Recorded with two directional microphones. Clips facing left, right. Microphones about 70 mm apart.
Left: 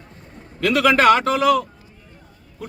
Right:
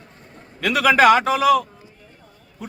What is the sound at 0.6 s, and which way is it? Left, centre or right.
A man's voice, centre.